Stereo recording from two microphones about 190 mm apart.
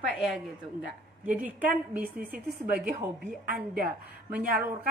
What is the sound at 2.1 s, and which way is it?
Speech, 50° right (ahead or behind).